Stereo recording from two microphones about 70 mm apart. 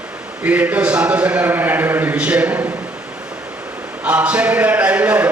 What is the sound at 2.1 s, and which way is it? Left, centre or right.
Speech, centre.